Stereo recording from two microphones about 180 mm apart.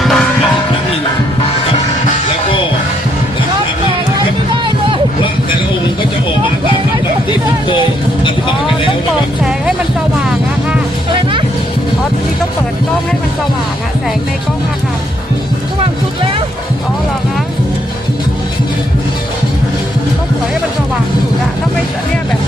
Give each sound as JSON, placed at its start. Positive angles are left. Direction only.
{"t": 0.0, "sound": "music", "side_deg": 0}
{"t": 9.4, "sound": "music", "side_deg": -5}
{"t": 11.1, "sound": "music", "side_deg": -30}